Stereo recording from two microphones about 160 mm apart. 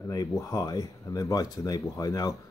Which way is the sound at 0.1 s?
20° left (ahead or behind).